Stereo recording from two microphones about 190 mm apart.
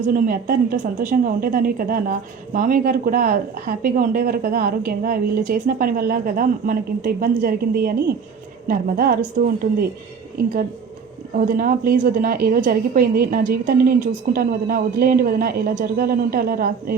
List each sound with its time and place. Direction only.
0.0 s a woman's voice: 50° right (ahead or behind)
11.3 s a woman's voice: 45° right (ahead or behind)